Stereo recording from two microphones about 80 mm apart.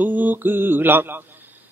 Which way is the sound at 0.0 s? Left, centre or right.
Right.